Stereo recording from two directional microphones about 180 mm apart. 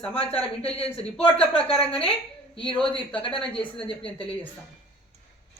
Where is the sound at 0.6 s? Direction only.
35° left (ahead or behind).